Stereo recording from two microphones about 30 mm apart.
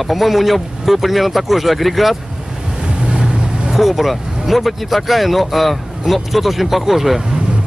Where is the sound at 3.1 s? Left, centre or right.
Right.